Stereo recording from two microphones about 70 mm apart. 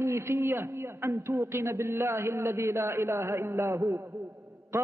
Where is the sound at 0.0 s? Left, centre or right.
Right.